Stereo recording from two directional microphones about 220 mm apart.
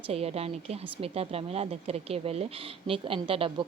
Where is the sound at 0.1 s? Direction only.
25° right (ahead or behind).